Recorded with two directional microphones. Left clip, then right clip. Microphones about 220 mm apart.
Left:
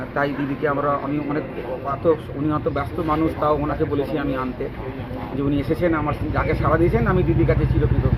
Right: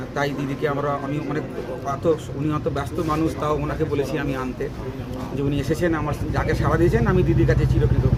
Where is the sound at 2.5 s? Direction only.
25° right (ahead or behind).